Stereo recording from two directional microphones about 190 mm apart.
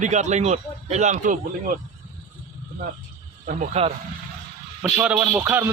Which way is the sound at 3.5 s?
35° right (ahead or behind).